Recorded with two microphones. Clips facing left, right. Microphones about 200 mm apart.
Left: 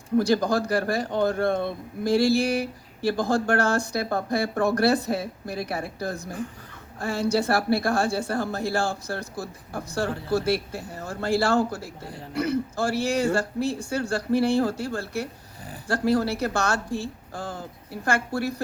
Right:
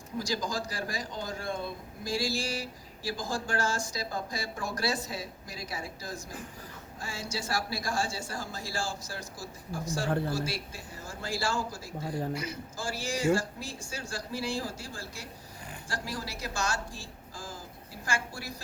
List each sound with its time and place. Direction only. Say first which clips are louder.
0.2 s speech: left 11 dB; 60° left (ahead or behind)